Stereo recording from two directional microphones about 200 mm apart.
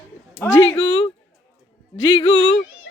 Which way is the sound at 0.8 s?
30° left (ahead or behind).